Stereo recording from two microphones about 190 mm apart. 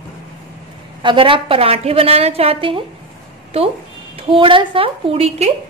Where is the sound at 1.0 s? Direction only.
25° right (ahead or behind).